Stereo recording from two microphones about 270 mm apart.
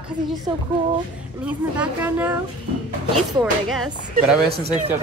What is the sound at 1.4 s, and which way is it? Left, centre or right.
Speech, centre.